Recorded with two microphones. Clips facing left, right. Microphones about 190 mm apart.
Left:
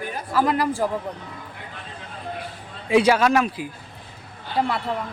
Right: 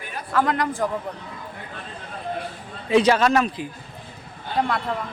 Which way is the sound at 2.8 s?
10° left (ahead or behind).